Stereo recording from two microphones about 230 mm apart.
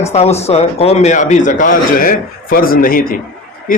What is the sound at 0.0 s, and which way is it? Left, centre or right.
A man's voice, left.